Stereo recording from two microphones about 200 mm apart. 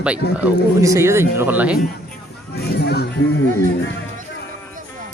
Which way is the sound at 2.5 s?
55° left (ahead or behind).